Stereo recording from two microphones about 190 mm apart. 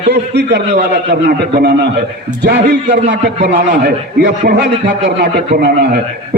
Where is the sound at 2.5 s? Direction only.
60° right (ahead or behind).